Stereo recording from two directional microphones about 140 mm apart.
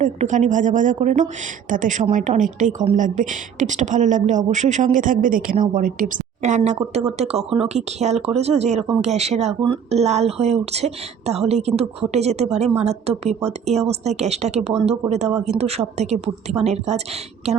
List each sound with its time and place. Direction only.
0.0 s speech: 60° right (ahead or behind)
6.7 s a woman's voice: 50° right (ahead or behind)